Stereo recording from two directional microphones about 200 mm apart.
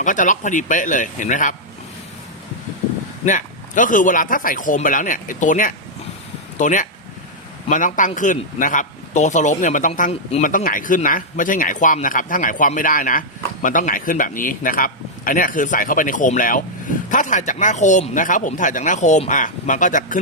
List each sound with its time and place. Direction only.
0.0 s a man's voice: 40° left (ahead or behind)
3.2 s a man's voice: 40° left (ahead or behind)